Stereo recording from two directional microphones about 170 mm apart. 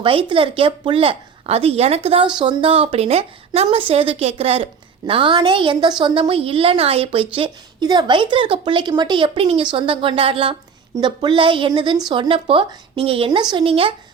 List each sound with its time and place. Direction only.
0.0 s speech: 30° right (ahead or behind)